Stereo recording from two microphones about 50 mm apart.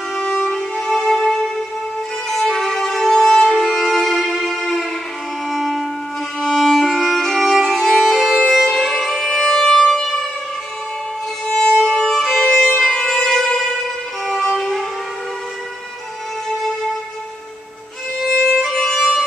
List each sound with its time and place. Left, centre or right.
0.2 s violin: centre
0.7 s music: centre
2.6 s violin: centre
5.5 s wind instrument: centre
6.4 s violin: centre
8.6 s music: centre
11.4 s violin: centre
13.0 s music: centre
14.2 s violin: centre
18.5 s violin: centre